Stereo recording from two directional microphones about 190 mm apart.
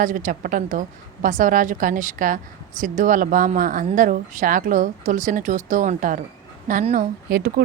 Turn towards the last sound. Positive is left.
turn(degrees=-50)  # may be behind; listen again after turning